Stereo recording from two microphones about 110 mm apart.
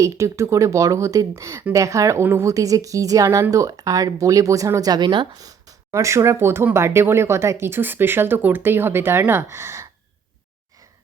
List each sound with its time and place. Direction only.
0.0 s speech: 25° right (ahead or behind)